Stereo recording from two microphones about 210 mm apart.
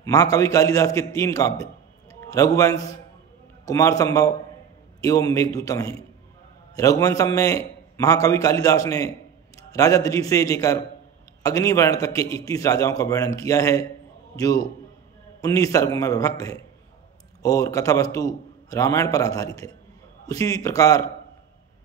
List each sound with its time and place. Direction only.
0.0 s a man's voice: 15° left (ahead or behind)
15.4 s a man's voice: 15° left (ahead or behind)